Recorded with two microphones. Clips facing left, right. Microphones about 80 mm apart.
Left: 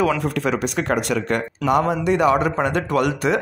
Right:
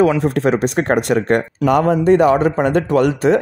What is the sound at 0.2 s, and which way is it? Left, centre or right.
A man's voice, right.